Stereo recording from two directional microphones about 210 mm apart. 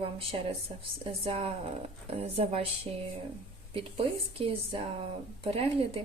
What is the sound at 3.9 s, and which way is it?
A woman's voice, 25° right (ahead or behind).